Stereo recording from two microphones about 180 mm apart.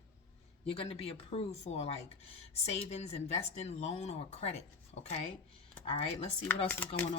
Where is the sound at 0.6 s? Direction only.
35° left (ahead or behind).